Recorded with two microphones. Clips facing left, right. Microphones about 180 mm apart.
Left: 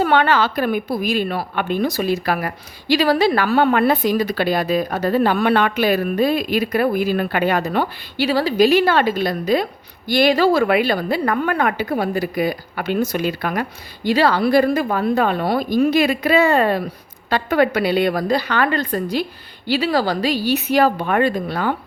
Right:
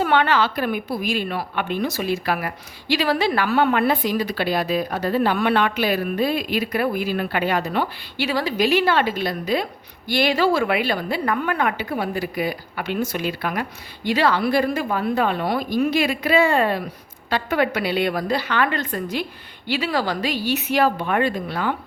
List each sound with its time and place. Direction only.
0.0 s a woman's voice: 40° left (ahead or behind)